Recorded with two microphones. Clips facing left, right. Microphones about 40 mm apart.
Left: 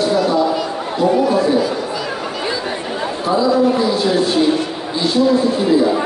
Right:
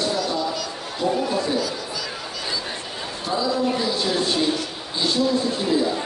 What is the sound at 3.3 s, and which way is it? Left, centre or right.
Speech, centre.